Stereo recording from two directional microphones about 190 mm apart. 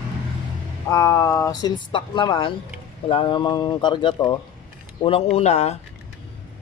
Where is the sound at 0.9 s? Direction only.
15° left (ahead or behind); by 5.7 s 35° left (ahead or behind).